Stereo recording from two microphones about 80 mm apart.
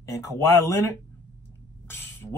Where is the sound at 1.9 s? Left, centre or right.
Left.